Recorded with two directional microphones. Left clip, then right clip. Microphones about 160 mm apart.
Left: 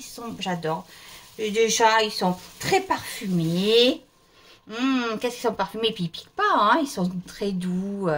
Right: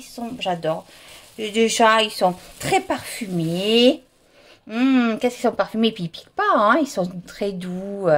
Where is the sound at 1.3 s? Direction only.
65° right (ahead or behind).